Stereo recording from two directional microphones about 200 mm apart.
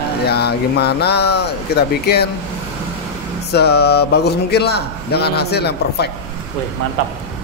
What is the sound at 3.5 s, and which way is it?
Speech, 55° left (ahead or behind).